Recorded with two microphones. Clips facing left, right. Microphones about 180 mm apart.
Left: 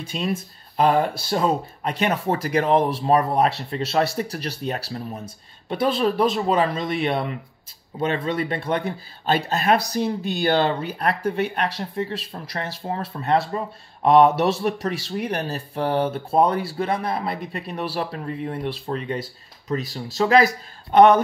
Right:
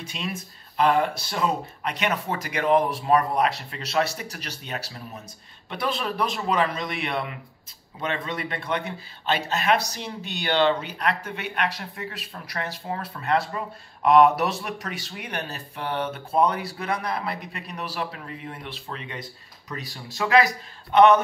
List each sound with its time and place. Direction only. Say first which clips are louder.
0.1 s speech: left 9 dB; 40° left (ahead or behind)